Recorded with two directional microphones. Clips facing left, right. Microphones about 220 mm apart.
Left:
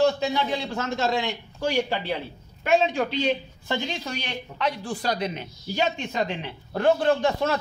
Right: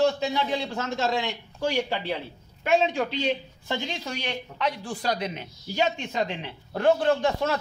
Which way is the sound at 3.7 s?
20° right (ahead or behind).